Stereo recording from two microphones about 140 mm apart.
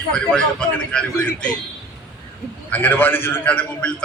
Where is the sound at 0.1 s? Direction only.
5° left (ahead or behind).